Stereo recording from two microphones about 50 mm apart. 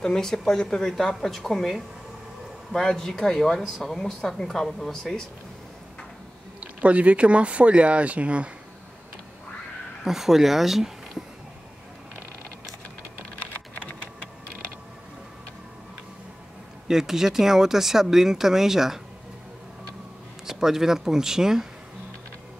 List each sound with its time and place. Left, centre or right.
0.0 s a man's voice: centre
6.6 s speech: right
10.0 s speech: centre
13.5 s typing: left
16.8 s speech: centre
20.4 s speech: centre